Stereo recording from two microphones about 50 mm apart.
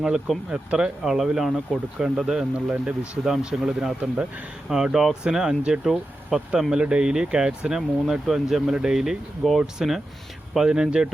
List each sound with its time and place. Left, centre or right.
0.5 s speech: right
1.0 s speech: centre
7.8 s speech: centre